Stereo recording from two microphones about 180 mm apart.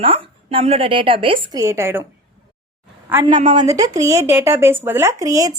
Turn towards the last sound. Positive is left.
turn(degrees=-20)  # may be behind; listen again after turning